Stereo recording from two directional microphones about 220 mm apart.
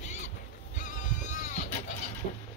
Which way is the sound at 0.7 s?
35° left (ahead or behind).